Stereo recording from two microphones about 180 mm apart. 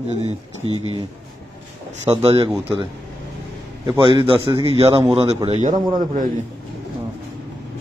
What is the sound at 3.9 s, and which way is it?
A man's voice, 25° right (ahead or behind).